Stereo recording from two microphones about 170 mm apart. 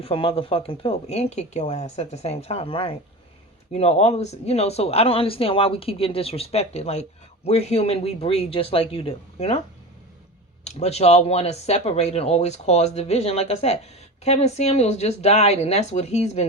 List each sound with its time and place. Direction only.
0.0 s speech: 30° left (ahead or behind)